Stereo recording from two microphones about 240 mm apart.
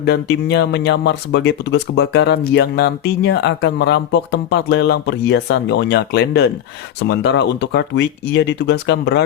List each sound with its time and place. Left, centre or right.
0.0 s speech: left